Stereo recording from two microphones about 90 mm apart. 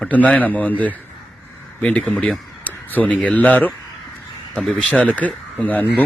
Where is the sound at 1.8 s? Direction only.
15° left (ahead or behind).